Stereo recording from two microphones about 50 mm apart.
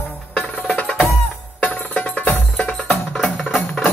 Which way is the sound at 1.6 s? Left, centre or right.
Left.